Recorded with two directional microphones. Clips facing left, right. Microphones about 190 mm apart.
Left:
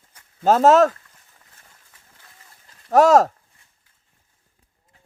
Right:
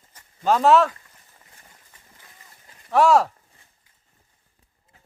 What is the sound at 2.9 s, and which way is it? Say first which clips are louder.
Speech: left 4 dB; 40° left (ahead or behind).